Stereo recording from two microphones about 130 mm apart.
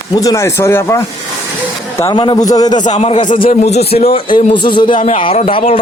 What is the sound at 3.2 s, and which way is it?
Speech, 35° left (ahead or behind).